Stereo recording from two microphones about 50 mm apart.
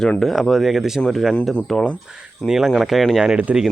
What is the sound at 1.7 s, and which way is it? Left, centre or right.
A man's voice, centre.